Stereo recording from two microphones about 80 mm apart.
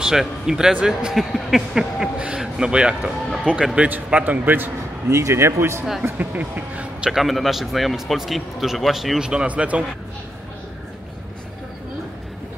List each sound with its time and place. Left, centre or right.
0.0 s a man's voice: centre; by 4.6 s right
5.0 s speech: right
6.0 s speech: right
7.1 s speech: centre